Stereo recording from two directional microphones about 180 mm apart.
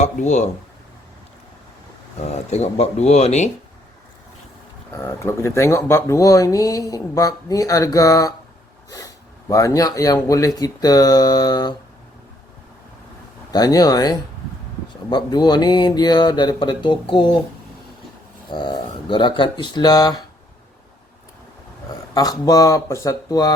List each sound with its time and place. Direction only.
0.0 s speech: 40° left (ahead or behind)
2.2 s speech: 40° left (ahead or behind)
4.9 s speech: 15° left (ahead or behind)
9.5 s speech: 20° left (ahead or behind)
13.5 s speech: 20° left (ahead or behind)
18.5 s speech: 25° left (ahead or behind)
22.1 s speech: 20° left (ahead or behind)